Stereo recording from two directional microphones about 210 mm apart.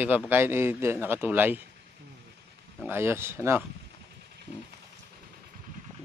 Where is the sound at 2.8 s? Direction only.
10° right (ahead or behind).